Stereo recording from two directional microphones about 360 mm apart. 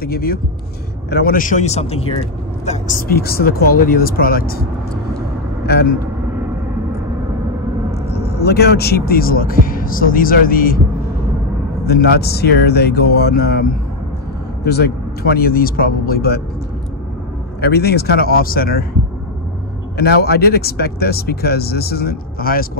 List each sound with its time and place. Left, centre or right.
0.0 s a man's voice: left
5.7 s a man's voice: left
8.1 s a man's voice: left
11.8 s a man's voice: left
17.6 s a man's voice: left
20.0 s a man's voice: left